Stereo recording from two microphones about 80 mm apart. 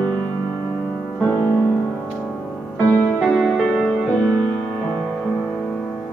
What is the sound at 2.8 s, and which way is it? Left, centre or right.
Music, left.